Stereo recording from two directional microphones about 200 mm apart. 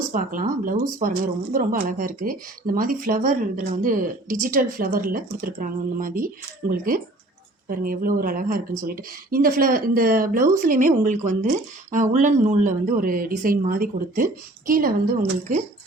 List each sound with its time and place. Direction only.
0.1 s speech: 45° right (ahead or behind)